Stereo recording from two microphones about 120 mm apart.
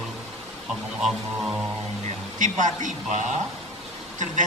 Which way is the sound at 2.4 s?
90° right.